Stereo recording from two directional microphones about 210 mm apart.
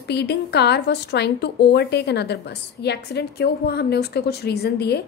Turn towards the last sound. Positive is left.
turn(degrees=50)  # may be behind; listen again after turning